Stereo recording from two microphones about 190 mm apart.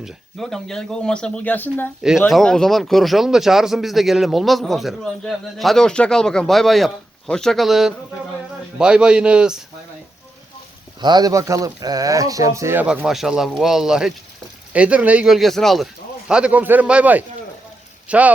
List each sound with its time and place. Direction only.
0.0 s speech: centre (ahead or behind)
2.0 s speech: 5° right (ahead or behind)
11.0 s speech: 20° right (ahead or behind)